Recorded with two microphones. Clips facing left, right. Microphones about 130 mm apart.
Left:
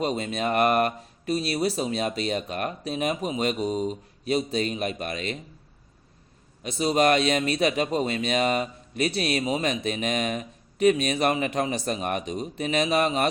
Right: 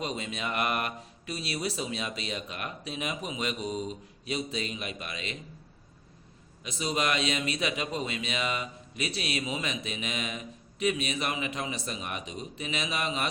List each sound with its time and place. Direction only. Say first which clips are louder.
0.0 s a man's voice: left 8 dB; 45° left (ahead or behind)
6.6 s a man's voice: left 8 dB; 45° left (ahead or behind)